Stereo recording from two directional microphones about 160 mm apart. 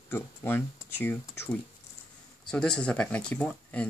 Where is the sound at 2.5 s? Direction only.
5° left (ahead or behind).